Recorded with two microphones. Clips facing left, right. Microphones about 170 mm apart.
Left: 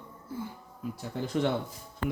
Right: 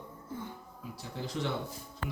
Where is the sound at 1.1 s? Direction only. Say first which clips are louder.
Left 6 dB; 55° left (ahead or behind).